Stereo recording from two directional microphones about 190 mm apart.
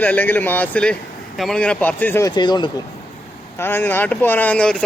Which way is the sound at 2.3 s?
25° left (ahead or behind).